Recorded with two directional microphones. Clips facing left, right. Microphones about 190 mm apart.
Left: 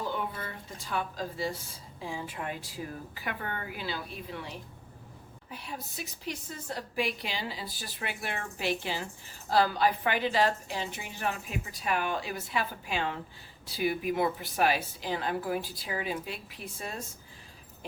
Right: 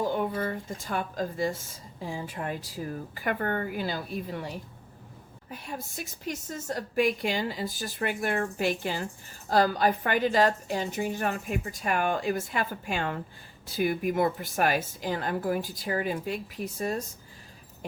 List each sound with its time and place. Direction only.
0.1 s speech: 45° right (ahead or behind)